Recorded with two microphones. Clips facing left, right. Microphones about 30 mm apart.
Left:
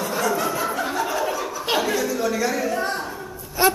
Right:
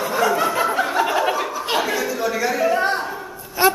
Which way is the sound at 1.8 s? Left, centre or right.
Centre.